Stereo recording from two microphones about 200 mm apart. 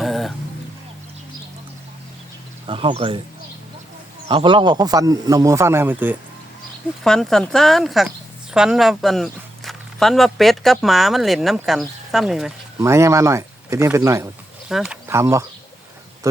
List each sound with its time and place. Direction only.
0.0 s vehicle: centre (ahead or behind)
2.6 s speech: 25° right (ahead or behind)
4.3 s speech: 25° right (ahead or behind); by 6.1 s 10° right (ahead or behind)
7.0 s speech: centre (ahead or behind)
12.8 s speech: 15° right (ahead or behind)
14.7 s speech: 5° right (ahead or behind)